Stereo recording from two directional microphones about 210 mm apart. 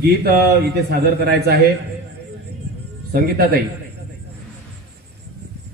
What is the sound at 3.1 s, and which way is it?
Speech, 50° right (ahead or behind).